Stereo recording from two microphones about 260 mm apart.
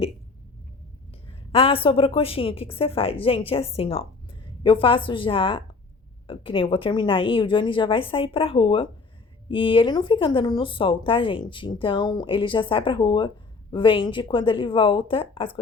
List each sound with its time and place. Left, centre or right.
1.3 s speech: left